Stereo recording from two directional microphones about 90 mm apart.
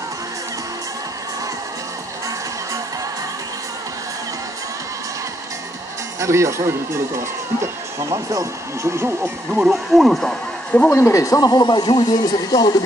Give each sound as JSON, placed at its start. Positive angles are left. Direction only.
{"t": 6.1, "sound": "speech", "side_deg": -35}
{"t": 9.5, "sound": "speech", "side_deg": 0}
{"t": 11.0, "sound": "speech", "side_deg": 35}